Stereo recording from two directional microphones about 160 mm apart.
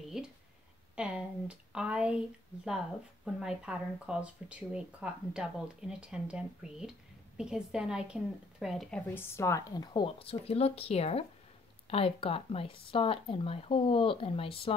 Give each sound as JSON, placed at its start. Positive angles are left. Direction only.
{"t": 0.2, "sound": "a sound", "side_deg": -5}
{"t": 0.9, "sound": "speech", "side_deg": -5}
{"t": 9.1, "sound": "speech", "side_deg": 15}